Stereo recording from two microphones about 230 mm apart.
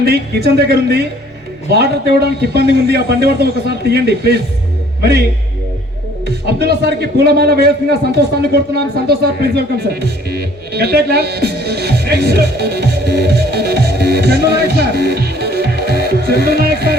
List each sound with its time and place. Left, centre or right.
0.0 s a man's voice: right
6.2 s a man's voice: right